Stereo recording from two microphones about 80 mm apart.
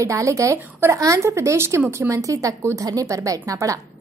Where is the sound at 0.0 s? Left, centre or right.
Right.